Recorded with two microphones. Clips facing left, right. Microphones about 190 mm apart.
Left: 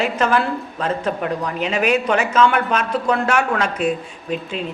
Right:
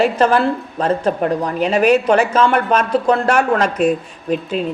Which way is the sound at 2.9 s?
30° right (ahead or behind).